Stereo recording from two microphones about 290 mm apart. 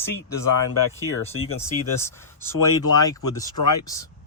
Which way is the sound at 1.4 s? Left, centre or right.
Left.